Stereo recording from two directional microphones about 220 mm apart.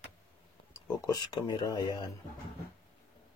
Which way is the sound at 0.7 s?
15° left (ahead or behind).